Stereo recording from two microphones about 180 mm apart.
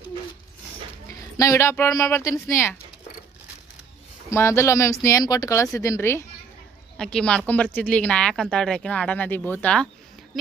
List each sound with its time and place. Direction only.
1.4 s speech: 15° left (ahead or behind)
4.3 s speech: 15° left (ahead or behind)
6.9 s speech: 5° left (ahead or behind)